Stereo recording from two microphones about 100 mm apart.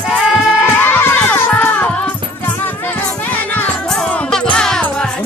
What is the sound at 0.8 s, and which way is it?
Music, 20° left (ahead or behind).